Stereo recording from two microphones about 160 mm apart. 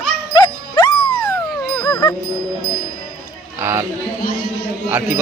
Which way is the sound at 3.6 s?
15° right (ahead or behind).